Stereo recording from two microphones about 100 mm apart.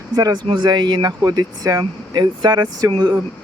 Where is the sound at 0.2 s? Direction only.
40° right (ahead or behind).